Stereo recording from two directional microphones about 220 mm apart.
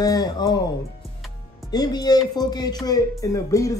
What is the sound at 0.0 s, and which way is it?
Speech, 15° left (ahead or behind).